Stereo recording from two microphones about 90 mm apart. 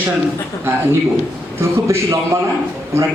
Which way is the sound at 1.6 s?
35° right (ahead or behind).